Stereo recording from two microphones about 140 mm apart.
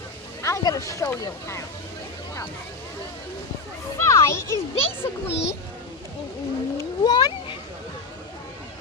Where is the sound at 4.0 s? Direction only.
20° left (ahead or behind).